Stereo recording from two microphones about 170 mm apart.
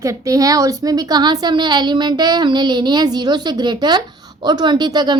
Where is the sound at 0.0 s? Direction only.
20° right (ahead or behind).